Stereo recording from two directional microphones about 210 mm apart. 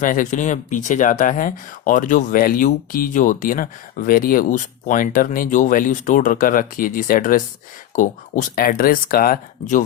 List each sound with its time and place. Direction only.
0.0 s speech: 40° left (ahead or behind)